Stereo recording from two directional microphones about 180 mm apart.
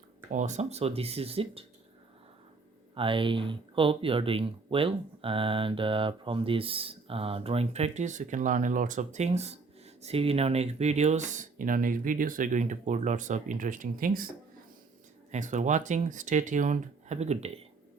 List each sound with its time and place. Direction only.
0.3 s speech: 40° right (ahead or behind)
2.9 s speech: 30° right (ahead or behind); by 14.3 s 50° right (ahead or behind)
15.3 s speech: 40° right (ahead or behind)